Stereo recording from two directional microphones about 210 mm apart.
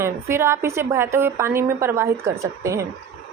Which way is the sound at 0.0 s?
10° right (ahead or behind).